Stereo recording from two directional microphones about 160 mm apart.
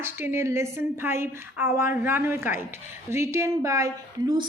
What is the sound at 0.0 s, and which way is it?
A woman's voice, 15° right (ahead or behind).